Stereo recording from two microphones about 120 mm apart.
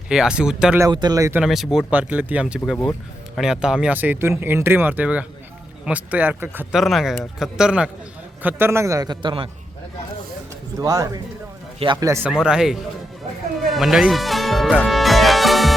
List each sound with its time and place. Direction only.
0.1 s speech: 5° right (ahead or behind)
0.8 s speech: 35° right (ahead or behind)
1.5 s a man's voice: centre (ahead or behind)
6.7 s a man's voice: centre (ahead or behind); by 9.5 s 45° right (ahead or behind)
10.8 s a man's voice: 30° right (ahead or behind)
12.2 s a man's voice: 5° right (ahead or behind)
13.6 s music: centre (ahead or behind)